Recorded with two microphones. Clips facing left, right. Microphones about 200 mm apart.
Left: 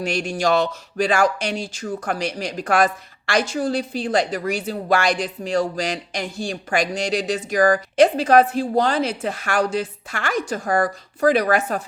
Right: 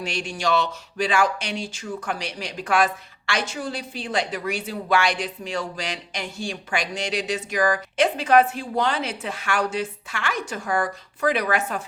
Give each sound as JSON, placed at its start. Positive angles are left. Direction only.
{"t": 0.0, "sound": "speech", "side_deg": 45}